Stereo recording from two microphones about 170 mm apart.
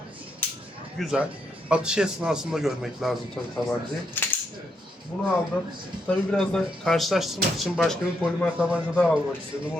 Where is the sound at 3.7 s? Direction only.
10° left (ahead or behind).